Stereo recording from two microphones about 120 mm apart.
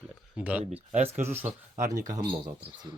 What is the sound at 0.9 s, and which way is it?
Speech, 60° right (ahead or behind).